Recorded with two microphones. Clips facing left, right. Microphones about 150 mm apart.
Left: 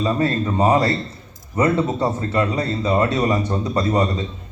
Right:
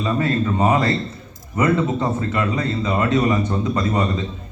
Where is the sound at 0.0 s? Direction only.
35° left (ahead or behind).